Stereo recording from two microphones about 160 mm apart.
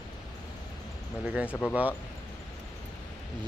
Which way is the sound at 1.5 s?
10° left (ahead or behind).